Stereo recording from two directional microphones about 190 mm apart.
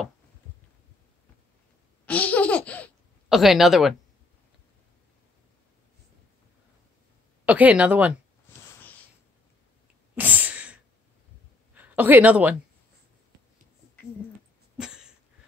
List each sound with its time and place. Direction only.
2.0 s laughter: 5° left (ahead or behind)
3.3 s speech: centre (ahead or behind)
7.4 s speech: 10° right (ahead or behind)
10.1 s sneeze: 10° right (ahead or behind)
11.7 s speech: 10° right (ahead or behind)
14.8 s a sound: 5° right (ahead or behind)